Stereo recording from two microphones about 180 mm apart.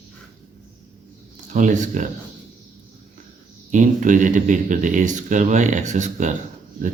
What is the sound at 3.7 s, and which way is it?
Speech, 45° right (ahead or behind).